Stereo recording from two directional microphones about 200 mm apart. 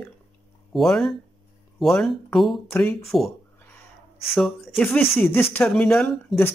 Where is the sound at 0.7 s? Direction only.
Centre (ahead or behind).